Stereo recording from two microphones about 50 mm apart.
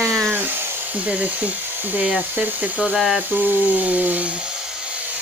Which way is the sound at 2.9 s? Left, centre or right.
Centre.